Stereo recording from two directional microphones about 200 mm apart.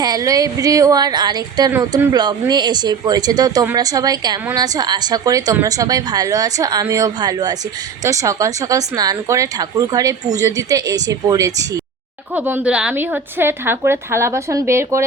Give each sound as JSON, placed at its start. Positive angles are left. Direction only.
{"t": 0.0, "sound": "speech", "side_deg": -20}